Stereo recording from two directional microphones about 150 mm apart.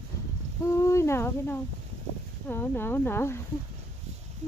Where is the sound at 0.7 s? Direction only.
20° left (ahead or behind).